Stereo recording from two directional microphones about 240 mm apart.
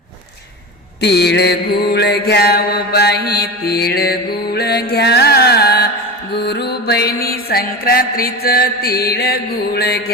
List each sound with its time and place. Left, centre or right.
1.0 s mantra: left